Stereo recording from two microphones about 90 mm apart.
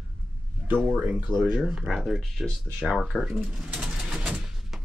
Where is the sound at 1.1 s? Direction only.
20° right (ahead or behind).